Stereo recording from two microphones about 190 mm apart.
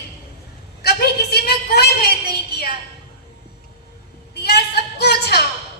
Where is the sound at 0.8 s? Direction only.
55° left (ahead or behind).